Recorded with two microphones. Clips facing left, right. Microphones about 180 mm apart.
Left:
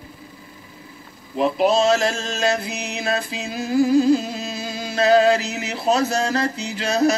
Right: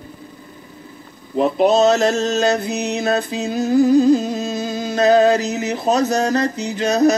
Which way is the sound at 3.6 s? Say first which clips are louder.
Right 3 dB; 20° right (ahead or behind).